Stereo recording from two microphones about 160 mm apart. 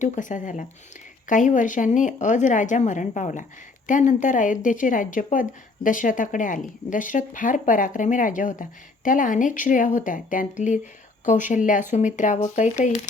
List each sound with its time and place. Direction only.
0.0 s a woman's voice: 55° left (ahead or behind)